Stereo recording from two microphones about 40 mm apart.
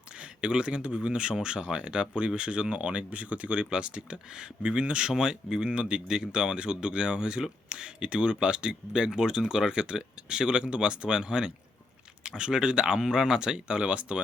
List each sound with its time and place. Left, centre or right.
0.2 s speech: right
5.1 s speech: centre